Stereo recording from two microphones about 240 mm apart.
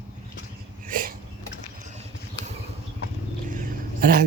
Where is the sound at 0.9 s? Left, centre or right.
Right.